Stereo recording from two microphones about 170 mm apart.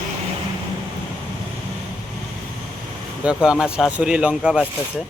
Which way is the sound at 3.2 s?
5° right (ahead or behind).